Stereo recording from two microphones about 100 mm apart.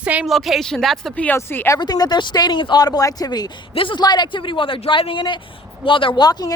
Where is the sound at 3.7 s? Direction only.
60° left (ahead or behind).